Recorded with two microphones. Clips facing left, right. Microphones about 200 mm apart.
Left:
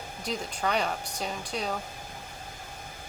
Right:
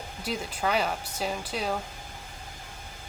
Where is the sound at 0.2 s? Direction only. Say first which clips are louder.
Right 1 dB; 5° right (ahead or behind).